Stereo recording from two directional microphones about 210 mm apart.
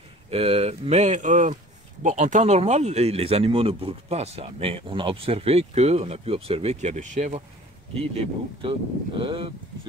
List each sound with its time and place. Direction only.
0.3 s speech: 30° right (ahead or behind)
8.5 s speech: 25° right (ahead or behind)